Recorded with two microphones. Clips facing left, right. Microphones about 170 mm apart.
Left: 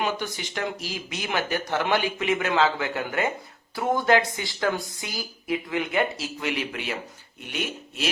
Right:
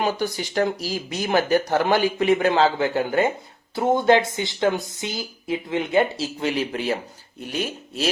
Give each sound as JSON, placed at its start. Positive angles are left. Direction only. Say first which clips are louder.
{"t": 0.0, "sound": "speech", "louder": "right 4 dB", "side_deg": -35}